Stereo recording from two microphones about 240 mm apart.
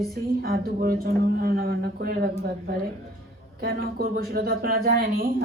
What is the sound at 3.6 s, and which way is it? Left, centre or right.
Speech, right.